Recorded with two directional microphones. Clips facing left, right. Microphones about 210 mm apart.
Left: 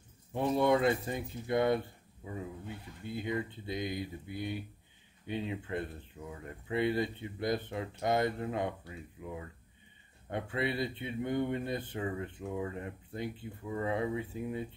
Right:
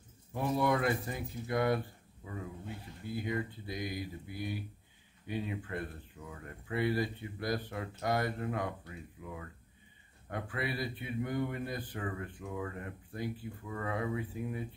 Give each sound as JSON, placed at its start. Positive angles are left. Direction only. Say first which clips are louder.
{"t": 0.3, "sound": "speech", "louder": "left 3 dB", "side_deg": 25}